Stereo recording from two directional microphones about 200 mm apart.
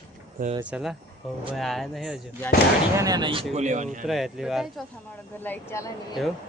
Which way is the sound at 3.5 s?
35° right (ahead or behind).